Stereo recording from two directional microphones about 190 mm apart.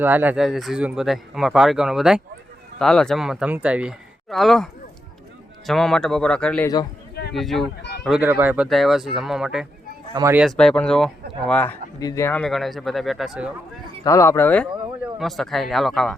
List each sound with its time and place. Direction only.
0.0 s speech: 10° right (ahead or behind)
7.8 s a sound: 60° left (ahead or behind)
8.0 s speech: 5° right (ahead or behind)
14.0 s speech: 15° left (ahead or behind)